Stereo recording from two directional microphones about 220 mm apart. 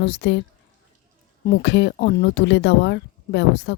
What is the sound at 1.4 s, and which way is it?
Speech, 50° left (ahead or behind).